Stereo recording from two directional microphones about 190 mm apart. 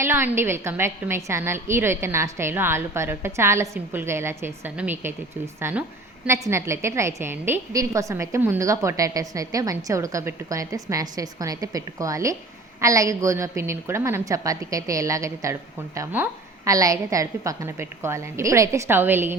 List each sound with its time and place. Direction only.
0.0 s a woman's voice: 10° right (ahead or behind)